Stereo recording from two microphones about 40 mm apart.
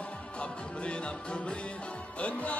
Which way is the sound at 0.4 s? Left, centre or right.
Left.